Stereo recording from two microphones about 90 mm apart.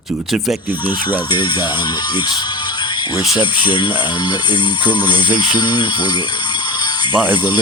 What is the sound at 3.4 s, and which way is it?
Speech, 60° left (ahead or behind).